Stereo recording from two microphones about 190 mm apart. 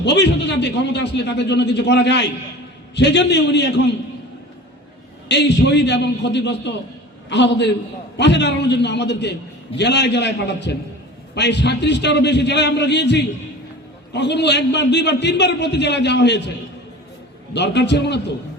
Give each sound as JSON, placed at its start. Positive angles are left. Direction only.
{"t": 0.0, "sound": "a man's voice", "side_deg": 65}
{"t": 5.3, "sound": "a man's voice", "side_deg": 65}
{"t": 17.5, "sound": "a man's voice", "side_deg": 65}